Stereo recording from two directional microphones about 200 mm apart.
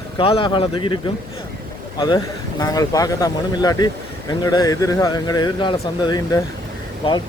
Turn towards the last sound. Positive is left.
turn(degrees=25)  # may be behind; listen again after turning